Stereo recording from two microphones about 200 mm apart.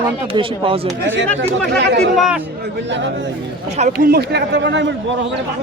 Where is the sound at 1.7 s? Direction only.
60° right (ahead or behind).